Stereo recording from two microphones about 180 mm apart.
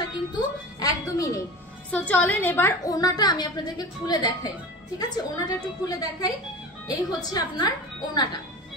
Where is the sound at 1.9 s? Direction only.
10° left (ahead or behind).